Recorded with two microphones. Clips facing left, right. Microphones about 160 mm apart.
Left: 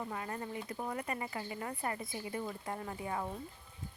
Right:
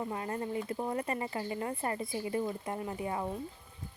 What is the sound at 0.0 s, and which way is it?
Speech, 25° right (ahead or behind).